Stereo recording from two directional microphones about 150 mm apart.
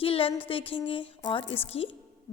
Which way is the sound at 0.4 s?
35° left (ahead or behind).